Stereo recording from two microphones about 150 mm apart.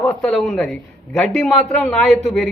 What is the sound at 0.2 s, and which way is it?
A man's voice, centre (ahead or behind).